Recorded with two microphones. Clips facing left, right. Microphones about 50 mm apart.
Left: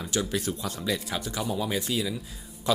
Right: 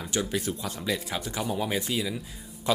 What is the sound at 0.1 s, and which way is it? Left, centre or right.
Speech, centre.